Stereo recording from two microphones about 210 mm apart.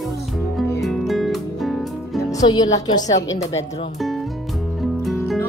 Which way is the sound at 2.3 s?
20° left (ahead or behind).